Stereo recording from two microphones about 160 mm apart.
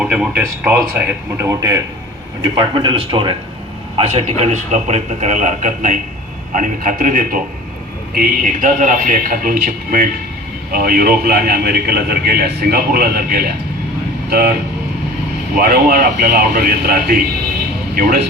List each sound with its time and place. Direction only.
0.0 s a man's voice: 5° right (ahead or behind); by 14.5 s 70° right (ahead or behind)
15.5 s a man's voice: 65° right (ahead or behind)